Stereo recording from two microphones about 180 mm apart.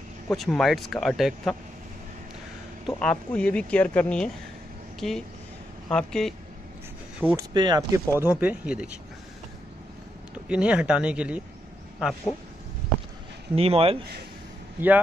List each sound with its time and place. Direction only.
0.3 s speech: centre (ahead or behind)
2.9 s speech: 5° left (ahead or behind)
7.2 s speech: 10° right (ahead or behind)
7.5 s speech: 20° right (ahead or behind)
8.2 s speech: 10° right (ahead or behind)
10.5 s speech: 5° right (ahead or behind)
13.6 s speech: 30° right (ahead or behind)
14.8 s speech: 10° right (ahead or behind)